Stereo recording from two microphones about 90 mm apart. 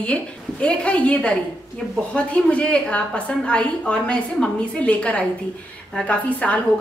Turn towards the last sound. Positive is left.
turn(degrees=15)  # may be behind; listen again after turning